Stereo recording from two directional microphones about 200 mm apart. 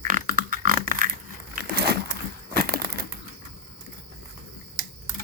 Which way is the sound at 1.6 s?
55° right (ahead or behind).